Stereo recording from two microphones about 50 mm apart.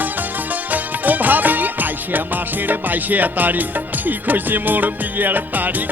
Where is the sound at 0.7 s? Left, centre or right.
Right.